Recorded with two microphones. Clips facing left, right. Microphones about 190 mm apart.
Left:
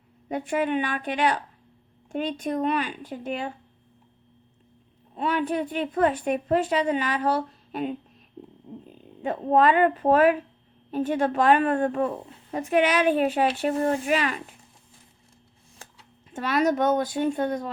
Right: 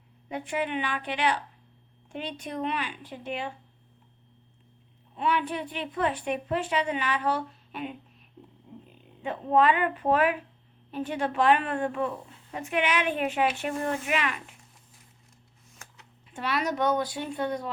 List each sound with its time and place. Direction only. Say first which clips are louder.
0.3 s a woman's voice: left 5 dB; 45° left (ahead or behind)
5.1 s a woman's voice: left 3 dB; 40° left (ahead or behind)
16.3 s a woman's voice: left 6 dB; 45° left (ahead or behind)